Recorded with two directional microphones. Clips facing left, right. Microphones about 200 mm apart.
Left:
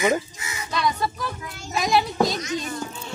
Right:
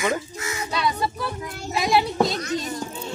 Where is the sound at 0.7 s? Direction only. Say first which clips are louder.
Left 1 dB; 30° right (ahead or behind).